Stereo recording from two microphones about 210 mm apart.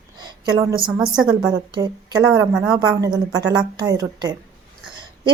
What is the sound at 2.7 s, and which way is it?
A woman's voice, 15° right (ahead or behind).